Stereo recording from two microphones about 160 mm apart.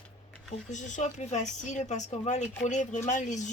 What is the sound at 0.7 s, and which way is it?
Speech, 50° left (ahead or behind).